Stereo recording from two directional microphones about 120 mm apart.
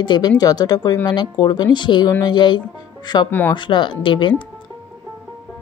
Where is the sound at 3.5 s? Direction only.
40° left (ahead or behind).